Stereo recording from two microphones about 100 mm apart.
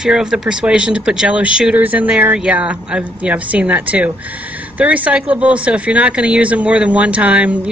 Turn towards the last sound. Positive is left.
turn(degrees=-15)  # may be behind; listen again after turning